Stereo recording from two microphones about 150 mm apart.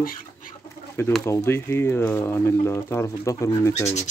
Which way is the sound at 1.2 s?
15° left (ahead or behind).